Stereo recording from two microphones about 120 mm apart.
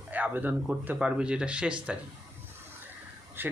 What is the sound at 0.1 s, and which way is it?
Speech, 15° right (ahead or behind).